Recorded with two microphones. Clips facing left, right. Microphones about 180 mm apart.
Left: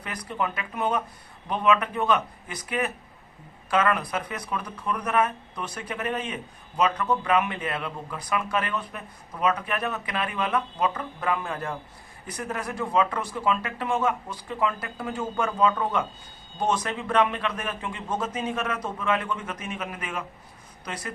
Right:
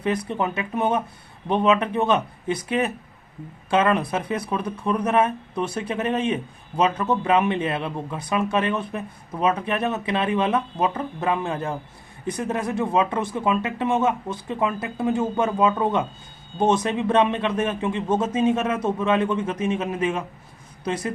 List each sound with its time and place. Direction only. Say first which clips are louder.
0.0 s speech: right 7 dB; 25° right (ahead or behind)